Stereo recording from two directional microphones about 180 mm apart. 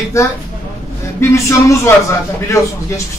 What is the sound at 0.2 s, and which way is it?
Speech, 15° left (ahead or behind).